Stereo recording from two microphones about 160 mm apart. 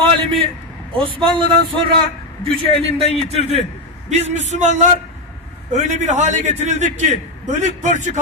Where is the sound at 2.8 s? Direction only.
40° right (ahead or behind).